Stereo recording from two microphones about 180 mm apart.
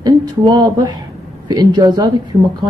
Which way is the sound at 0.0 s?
25° right (ahead or behind).